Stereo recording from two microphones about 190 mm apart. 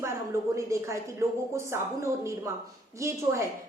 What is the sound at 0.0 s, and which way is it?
A woman's voice, 15° right (ahead or behind).